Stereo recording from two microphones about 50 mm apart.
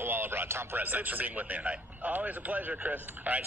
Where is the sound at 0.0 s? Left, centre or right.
Right.